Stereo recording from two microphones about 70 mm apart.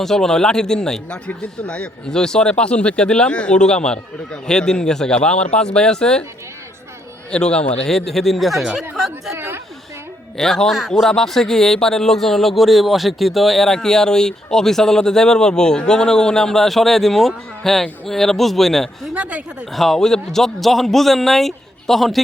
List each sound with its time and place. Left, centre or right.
0.0 s speech: centre
7.3 s a man's voice: centre
10.3 s a man's voice: centre
19.1 s speech: centre
19.7 s a man's voice: centre